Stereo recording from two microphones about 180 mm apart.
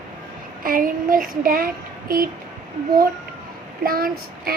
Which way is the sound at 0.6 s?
50° right (ahead or behind).